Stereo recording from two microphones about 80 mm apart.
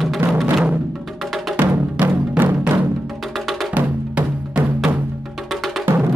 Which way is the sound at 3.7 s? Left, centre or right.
Centre.